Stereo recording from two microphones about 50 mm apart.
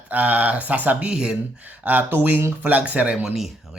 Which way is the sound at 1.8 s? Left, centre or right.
Right.